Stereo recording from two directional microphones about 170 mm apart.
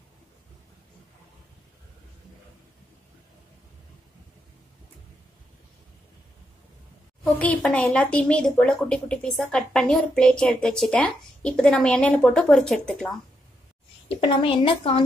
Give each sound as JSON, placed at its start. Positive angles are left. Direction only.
{"t": 7.2, "sound": "speech", "side_deg": 10}
{"t": 14.0, "sound": "a woman's voice", "side_deg": 35}